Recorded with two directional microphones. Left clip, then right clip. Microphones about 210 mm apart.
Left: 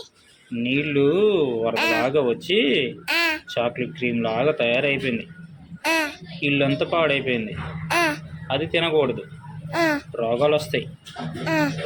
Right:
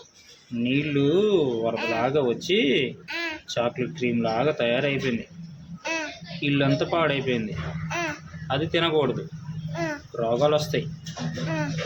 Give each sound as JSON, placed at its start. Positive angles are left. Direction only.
{"t": 0.6, "sound": "speech", "side_deg": -10}
{"t": 1.7, "sound": "music", "side_deg": 40}
{"t": 2.0, "sound": "speech", "side_deg": -10}
{"t": 3.1, "sound": "a sound", "side_deg": 40}
{"t": 3.5, "sound": "speech", "side_deg": -10}
{"t": 5.8, "sound": "child singing", "side_deg": 35}
{"t": 6.4, "sound": "speech", "side_deg": -10}
{"t": 7.9, "sound": "a sound", "side_deg": 35}
{"t": 8.4, "sound": "speech", "side_deg": -10}
{"t": 9.7, "sound": "a sound", "side_deg": 35}
{"t": 10.2, "sound": "speech", "side_deg": -10}
{"t": 11.4, "sound": "music", "side_deg": 35}